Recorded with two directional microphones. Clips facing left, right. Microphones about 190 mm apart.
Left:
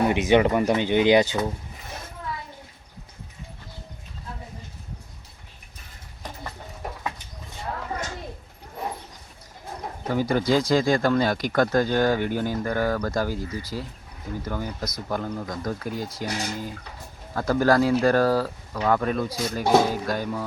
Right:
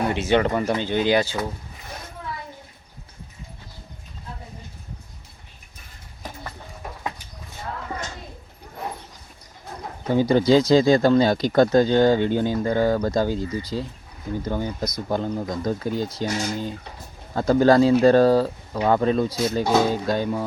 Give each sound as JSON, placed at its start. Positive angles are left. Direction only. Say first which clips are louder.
{"t": 0.0, "sound": "speech", "louder": "left 2 dB", "side_deg": 15}
{"t": 10.1, "sound": "speech", "louder": "right 5 dB", "side_deg": -25}